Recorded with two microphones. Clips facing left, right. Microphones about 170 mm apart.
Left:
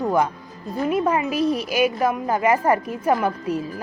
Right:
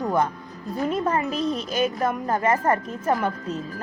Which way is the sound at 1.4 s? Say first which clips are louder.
Left 4 dB; 60° left (ahead or behind).